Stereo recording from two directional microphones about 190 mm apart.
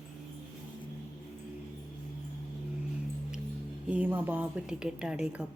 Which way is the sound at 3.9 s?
10° right (ahead or behind).